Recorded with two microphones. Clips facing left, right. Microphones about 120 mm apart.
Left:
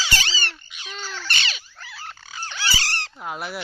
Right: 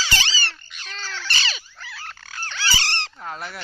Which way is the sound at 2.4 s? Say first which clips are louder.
Even; 10° left (ahead or behind).